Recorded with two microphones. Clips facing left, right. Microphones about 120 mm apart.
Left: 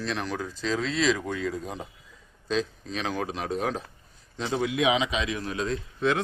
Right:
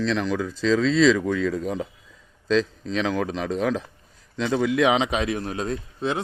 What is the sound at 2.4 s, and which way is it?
Speech, 90° right.